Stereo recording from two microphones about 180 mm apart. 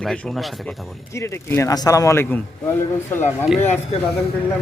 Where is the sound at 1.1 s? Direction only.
15° left (ahead or behind).